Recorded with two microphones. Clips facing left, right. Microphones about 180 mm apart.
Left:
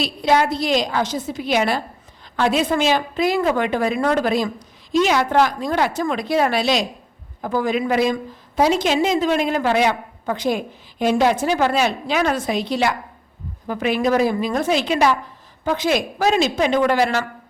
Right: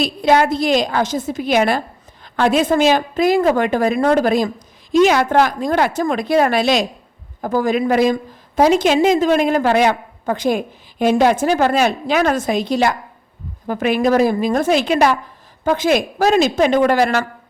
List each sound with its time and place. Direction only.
0.0 s a woman's voice: 50° right (ahead or behind)